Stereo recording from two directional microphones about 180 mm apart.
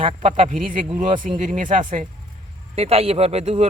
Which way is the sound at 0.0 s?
35° right (ahead or behind).